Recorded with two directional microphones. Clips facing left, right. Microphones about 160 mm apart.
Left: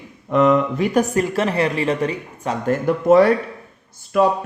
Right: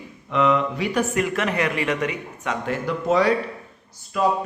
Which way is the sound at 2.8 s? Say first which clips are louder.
Left 7 dB; 55° left (ahead or behind).